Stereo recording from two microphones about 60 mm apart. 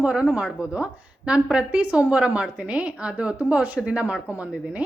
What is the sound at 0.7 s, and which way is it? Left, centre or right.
A woman's voice, centre.